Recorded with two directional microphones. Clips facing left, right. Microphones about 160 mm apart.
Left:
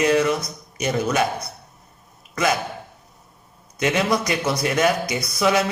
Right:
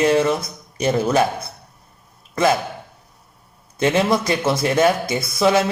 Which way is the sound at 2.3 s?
30° right (ahead or behind).